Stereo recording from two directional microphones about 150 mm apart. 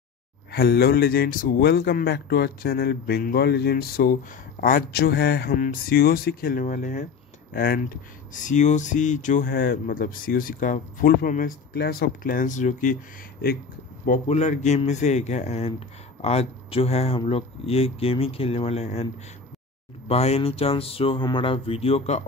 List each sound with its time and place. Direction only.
0.5 s speech: 90° left; by 7.1 s 60° left (ahead or behind)
7.5 s speech: 80° left
8.3 s speech: 55° left (ahead or behind)
14.0 s a man's voice: 60° left (ahead or behind); by 19.0 s 45° left (ahead or behind)
20.1 s speech: 45° left (ahead or behind)